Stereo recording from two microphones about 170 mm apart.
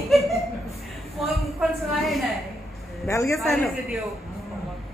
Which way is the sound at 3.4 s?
Centre (ahead or behind).